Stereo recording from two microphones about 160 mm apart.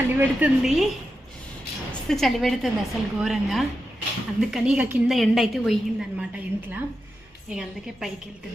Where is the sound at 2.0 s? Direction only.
Centre (ahead or behind).